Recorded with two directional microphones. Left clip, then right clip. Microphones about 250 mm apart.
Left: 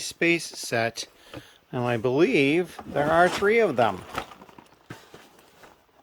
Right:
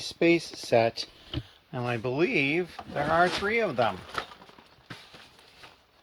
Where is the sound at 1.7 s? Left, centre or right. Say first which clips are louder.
Left 6 dB; left.